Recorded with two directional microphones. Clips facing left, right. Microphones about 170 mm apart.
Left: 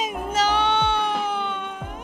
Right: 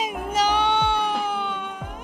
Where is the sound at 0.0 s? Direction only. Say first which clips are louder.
Even; 10° right (ahead or behind).